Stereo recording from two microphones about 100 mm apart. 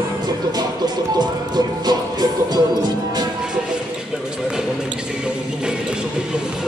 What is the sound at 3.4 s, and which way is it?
Basketball bounce, 10° right (ahead or behind).